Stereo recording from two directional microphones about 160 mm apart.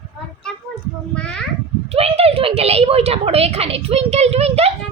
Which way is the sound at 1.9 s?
40° right (ahead or behind).